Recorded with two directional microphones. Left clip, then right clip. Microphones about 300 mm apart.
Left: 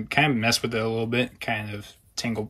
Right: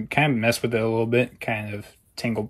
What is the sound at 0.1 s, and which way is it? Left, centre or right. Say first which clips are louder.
Speech: even; centre.